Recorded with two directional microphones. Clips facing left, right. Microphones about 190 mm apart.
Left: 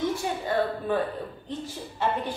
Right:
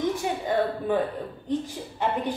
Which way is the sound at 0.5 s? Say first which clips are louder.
Right 1 dB; 15° right (ahead or behind).